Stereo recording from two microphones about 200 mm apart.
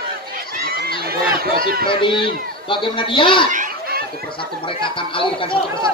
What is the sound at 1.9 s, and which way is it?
A man's voice, 25° left (ahead or behind).